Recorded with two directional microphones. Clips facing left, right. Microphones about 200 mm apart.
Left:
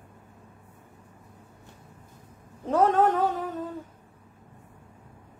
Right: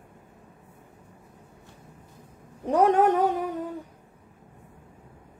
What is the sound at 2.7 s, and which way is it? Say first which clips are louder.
A woman's voice: right 2 dB; 15° right (ahead or behind).